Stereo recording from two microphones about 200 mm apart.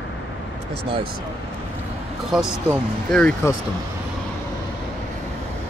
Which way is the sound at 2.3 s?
Centre (ahead or behind).